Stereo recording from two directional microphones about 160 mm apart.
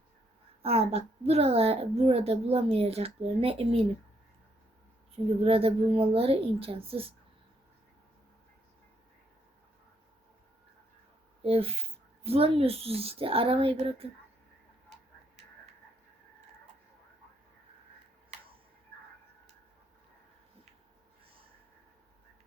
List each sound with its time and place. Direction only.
0.6 s a woman's voice: 40° right (ahead or behind)
5.1 s a woman's voice: 35° right (ahead or behind)
11.4 s a woman's voice: 35° right (ahead or behind)